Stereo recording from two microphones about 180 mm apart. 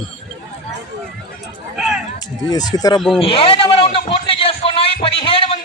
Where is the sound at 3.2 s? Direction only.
30° left (ahead or behind).